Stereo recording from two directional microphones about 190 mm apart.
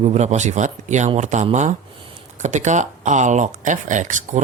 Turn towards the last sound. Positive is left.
turn(degrees=-40)  # may be behind; listen again after turning